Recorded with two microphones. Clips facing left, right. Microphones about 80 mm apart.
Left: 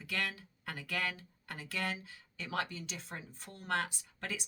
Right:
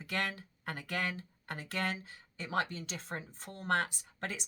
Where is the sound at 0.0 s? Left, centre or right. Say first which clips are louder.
Right 2 dB; right.